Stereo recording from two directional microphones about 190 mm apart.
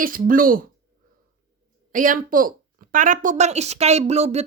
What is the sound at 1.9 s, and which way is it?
Speech, 45° right (ahead or behind).